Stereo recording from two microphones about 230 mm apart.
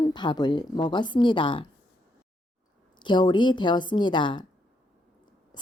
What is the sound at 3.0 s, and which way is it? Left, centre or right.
A woman's voice, centre.